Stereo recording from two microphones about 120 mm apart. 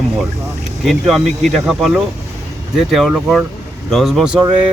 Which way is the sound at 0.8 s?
Centre (ahead or behind).